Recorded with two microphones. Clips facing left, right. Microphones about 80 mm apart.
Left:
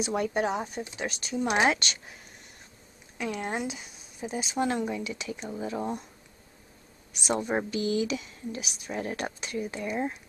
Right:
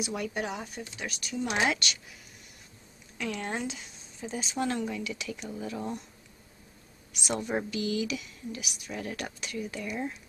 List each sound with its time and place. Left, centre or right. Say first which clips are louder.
0.0 s a woman's voice: left 5 dB; left
3.2 s a woman's voice: left 2 dB; centre
7.1 s a woman's voice: left 3 dB; left